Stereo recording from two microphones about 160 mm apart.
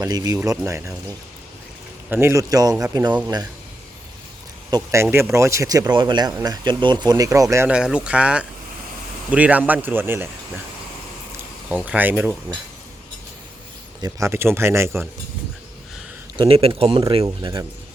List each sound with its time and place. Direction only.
0.0 s speech: 20° right (ahead or behind)
2.0 s speech: 15° right (ahead or behind)
4.7 s speech: 20° right (ahead or behind)
7.5 s speech: 10° right (ahead or behind)
11.7 s speech: 10° right (ahead or behind)
14.0 s speech: 15° right (ahead or behind)
16.4 s speech: 35° right (ahead or behind)
17.2 s speech: 25° right (ahead or behind)